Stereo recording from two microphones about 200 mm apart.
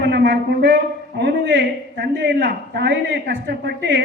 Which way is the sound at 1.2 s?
55° right (ahead or behind).